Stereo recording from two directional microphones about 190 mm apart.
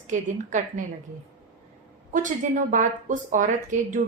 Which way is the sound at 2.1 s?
40° right (ahead or behind).